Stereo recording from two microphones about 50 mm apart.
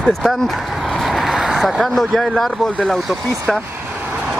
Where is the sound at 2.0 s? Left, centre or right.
Centre.